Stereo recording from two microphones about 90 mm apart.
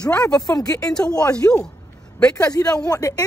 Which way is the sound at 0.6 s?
40° left (ahead or behind).